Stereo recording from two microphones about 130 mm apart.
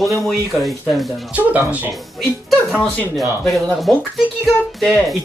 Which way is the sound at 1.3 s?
10° right (ahead or behind).